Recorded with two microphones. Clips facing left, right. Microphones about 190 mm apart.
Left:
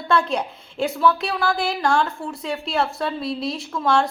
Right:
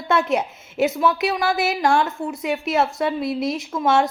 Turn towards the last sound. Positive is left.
turn(degrees=-20)  # may be behind; listen again after turning